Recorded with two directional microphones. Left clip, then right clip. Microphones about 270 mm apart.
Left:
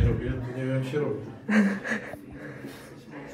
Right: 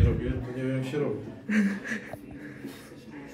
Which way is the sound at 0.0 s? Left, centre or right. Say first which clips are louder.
Even; centre.